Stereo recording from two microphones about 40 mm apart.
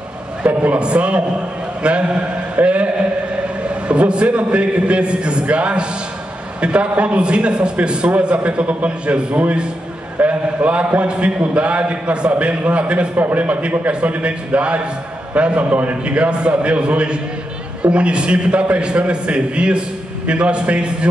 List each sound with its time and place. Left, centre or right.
0.4 s a man's voice: right
13.1 s a man's voice: right